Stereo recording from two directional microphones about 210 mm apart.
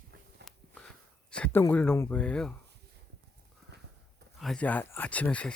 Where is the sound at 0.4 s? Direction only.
55° right (ahead or behind).